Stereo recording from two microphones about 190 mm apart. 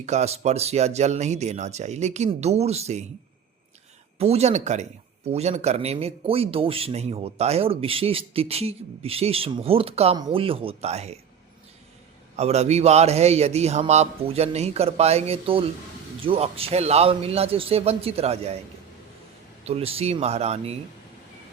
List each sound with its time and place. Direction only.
0.0 s speech: 35° right (ahead or behind)
4.2 s a man's voice: 35° right (ahead or behind)
12.4 s speech: 35° right (ahead or behind)
19.6 s speech: 30° right (ahead or behind)